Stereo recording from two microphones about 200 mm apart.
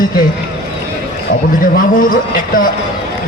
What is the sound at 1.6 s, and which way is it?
A man's voice, 45° left (ahead or behind).